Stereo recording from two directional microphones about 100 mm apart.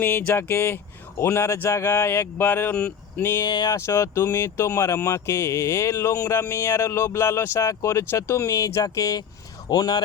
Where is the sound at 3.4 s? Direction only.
45° left (ahead or behind).